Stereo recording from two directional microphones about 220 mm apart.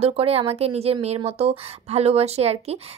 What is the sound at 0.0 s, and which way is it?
A woman's voice, 25° right (ahead or behind).